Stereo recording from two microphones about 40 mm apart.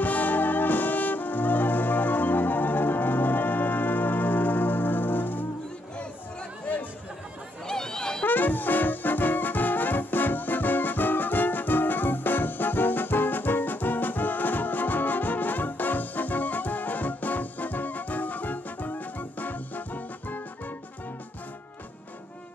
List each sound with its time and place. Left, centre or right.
0.0 s music: left
7.6 s a sound: centre
8.3 s music: left